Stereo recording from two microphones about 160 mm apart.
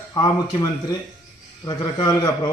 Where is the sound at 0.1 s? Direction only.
25° left (ahead or behind).